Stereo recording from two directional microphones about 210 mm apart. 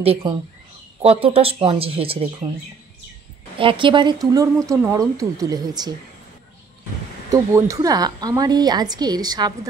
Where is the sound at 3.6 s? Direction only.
25° right (ahead or behind).